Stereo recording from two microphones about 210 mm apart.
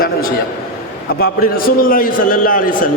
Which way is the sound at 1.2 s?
45° left (ahead or behind).